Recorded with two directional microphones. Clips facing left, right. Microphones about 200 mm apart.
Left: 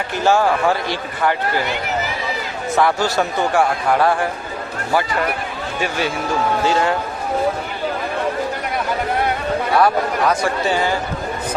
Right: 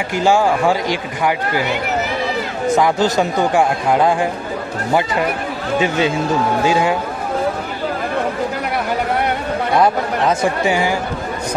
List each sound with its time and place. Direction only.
0.1 s speech: 15° right (ahead or behind)
2.8 s speech: 15° right (ahead or behind)
5.8 s speech: 20° right (ahead or behind)
6.6 s speech: 10° right (ahead or behind)
9.8 s speech: 20° right (ahead or behind)